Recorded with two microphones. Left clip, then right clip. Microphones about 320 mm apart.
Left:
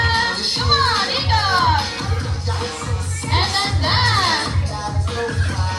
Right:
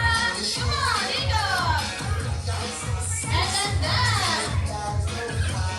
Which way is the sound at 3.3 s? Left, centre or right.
Centre.